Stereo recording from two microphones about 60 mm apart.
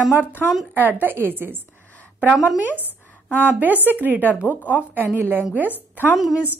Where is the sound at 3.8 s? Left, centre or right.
Right.